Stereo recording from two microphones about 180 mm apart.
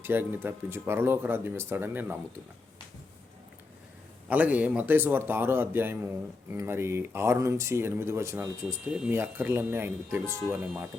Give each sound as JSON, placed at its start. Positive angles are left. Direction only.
{"t": 0.0, "sound": "speech", "side_deg": -10}
{"t": 4.3, "sound": "speech", "side_deg": -10}